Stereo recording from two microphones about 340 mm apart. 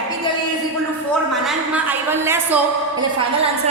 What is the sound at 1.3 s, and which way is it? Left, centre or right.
A woman's voice, centre.